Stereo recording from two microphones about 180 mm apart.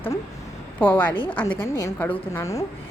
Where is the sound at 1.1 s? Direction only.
30° left (ahead or behind).